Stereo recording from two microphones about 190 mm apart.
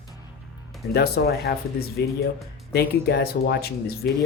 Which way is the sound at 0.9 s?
55° left (ahead or behind).